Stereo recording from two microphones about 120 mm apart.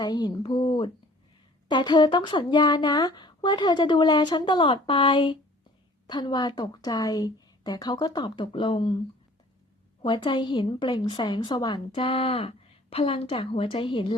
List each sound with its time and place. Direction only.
0.0 s speech: 35° left (ahead or behind)
10.0 s a woman's voice: 45° left (ahead or behind)